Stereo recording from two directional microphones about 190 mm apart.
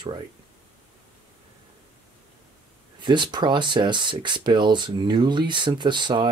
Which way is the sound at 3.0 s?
25° right (ahead or behind).